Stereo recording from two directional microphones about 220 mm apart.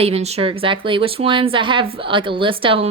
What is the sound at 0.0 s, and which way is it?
A woman's voice, 30° right (ahead or behind).